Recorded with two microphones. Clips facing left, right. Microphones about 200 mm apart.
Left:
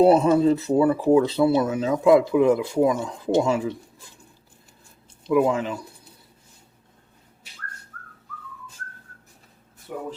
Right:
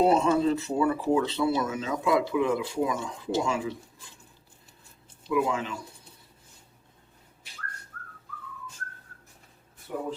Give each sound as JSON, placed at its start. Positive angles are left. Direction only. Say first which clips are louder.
{"t": 0.1, "sound": "speech", "louder": "left 6 dB", "side_deg": 35}
{"t": 5.3, "sound": "speech", "louder": "left 7 dB", "side_deg": 40}